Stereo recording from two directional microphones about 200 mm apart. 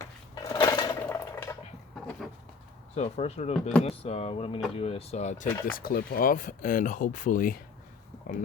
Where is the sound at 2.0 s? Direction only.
Centre (ahead or behind).